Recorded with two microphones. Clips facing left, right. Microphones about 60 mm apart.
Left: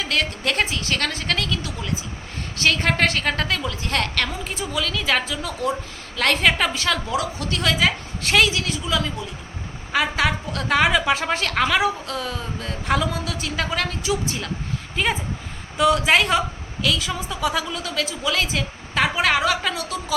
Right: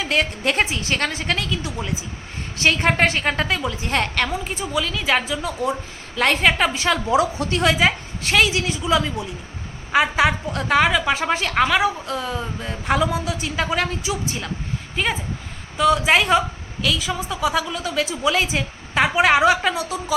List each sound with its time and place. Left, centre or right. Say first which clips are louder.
0.0 s a woman's voice: right 3 dB; centre
8.2 s a woman's voice: even; centre
8.9 s a woman's voice: right 6 dB; centre
10.8 s a woman's voice: right 1 dB; centre